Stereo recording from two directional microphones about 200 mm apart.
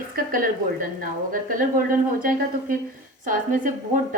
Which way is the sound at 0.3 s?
45° right (ahead or behind).